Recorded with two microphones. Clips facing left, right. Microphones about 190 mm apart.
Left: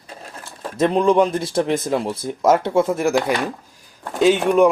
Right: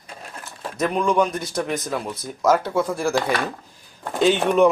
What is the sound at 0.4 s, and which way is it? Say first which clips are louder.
Speech: left 5 dB; 30° left (ahead or behind).